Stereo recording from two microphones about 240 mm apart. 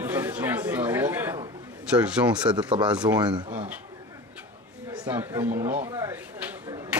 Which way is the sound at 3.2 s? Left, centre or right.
Centre.